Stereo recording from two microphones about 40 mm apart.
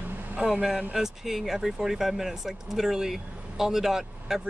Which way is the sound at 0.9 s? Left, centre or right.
Centre.